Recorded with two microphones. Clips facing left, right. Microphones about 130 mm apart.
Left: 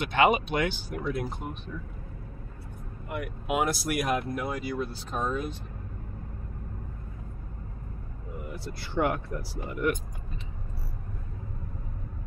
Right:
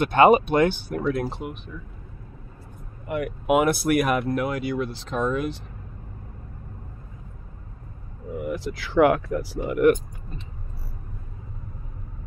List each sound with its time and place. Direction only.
0.0 s speech: 45° right (ahead or behind)
3.1 s speech: 65° right (ahead or behind)
8.5 s speech: 90° right; by 9.9 s 70° right (ahead or behind)